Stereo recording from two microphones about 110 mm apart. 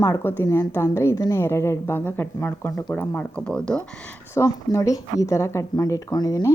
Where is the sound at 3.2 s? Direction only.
10° left (ahead or behind).